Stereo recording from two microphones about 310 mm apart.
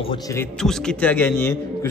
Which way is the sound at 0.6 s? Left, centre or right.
Centre.